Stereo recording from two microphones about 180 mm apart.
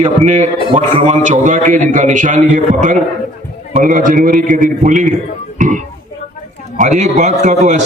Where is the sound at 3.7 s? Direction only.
40° right (ahead or behind).